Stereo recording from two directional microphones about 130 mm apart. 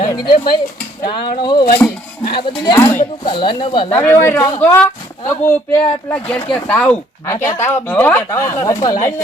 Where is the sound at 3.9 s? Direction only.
15° left (ahead or behind).